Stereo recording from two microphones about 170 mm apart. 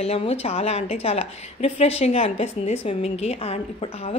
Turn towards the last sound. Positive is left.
turn(degrees=35)  # may be behind; listen again after turning